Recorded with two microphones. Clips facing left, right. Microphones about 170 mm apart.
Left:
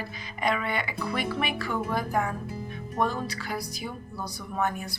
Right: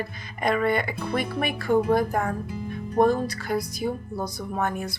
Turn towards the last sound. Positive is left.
turn(degrees=-50)  # may be behind; listen again after turning